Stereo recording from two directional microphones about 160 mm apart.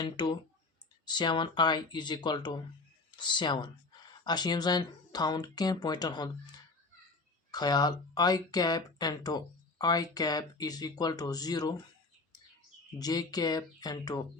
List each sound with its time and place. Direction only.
0.0 s speech: 30° left (ahead or behind)
7.5 s speech: 25° left (ahead or behind)
13.0 s speech: 25° left (ahead or behind)